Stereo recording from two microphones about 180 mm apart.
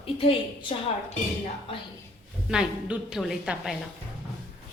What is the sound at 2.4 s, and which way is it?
A woman's voice, 5° right (ahead or behind).